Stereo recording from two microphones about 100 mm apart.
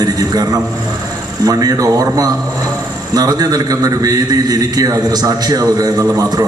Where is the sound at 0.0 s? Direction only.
40° right (ahead or behind).